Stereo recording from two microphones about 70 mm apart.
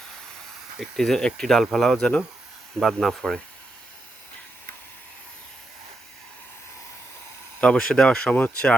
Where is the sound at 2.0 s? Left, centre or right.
Centre.